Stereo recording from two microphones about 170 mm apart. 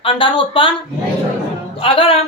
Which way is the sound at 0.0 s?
30° left (ahead or behind).